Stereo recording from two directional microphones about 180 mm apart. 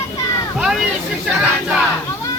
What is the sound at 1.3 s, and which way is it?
Battle cry, 5° right (ahead or behind).